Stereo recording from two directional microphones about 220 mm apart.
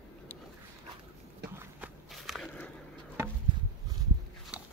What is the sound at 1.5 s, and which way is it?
Walk, 5° right (ahead or behind).